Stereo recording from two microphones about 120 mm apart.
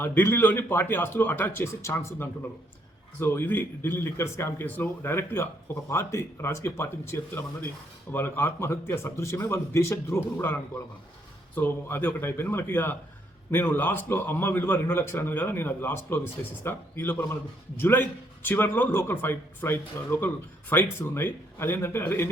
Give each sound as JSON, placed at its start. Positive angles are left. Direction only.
{"t": 0.0, "sound": "a man's voice", "side_deg": 20}